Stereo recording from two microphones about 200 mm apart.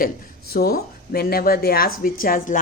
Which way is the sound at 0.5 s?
50° left (ahead or behind).